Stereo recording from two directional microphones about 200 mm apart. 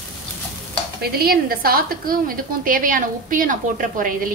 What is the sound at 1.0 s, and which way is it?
A woman's voice, 50° right (ahead or behind).